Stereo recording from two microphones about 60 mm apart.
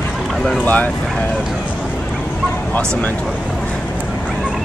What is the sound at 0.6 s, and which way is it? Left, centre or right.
Speech, left.